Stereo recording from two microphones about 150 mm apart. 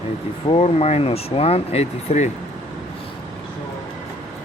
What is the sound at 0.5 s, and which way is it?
Speech, 45° left (ahead or behind).